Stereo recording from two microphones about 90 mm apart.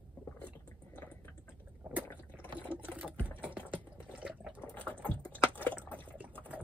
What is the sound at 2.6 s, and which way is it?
Sewing machine, 20° right (ahead or behind).